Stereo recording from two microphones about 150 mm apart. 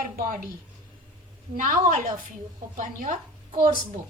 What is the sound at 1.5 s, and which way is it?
A woman's voice, 60° right (ahead or behind).